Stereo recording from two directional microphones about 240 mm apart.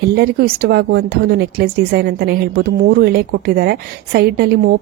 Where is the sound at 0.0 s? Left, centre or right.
Right.